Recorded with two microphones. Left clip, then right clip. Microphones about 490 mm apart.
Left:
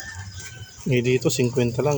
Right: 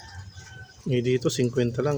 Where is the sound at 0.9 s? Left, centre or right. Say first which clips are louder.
Left 3 dB; right.